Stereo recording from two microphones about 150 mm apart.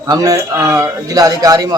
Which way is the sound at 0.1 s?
25° right (ahead or behind).